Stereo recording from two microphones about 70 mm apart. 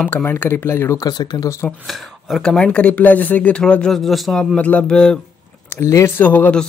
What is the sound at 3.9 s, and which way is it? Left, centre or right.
Speech, centre.